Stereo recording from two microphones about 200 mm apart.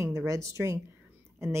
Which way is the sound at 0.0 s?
15° right (ahead or behind).